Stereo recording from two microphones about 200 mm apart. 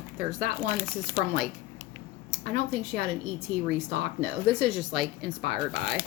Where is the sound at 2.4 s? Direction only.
5° left (ahead or behind).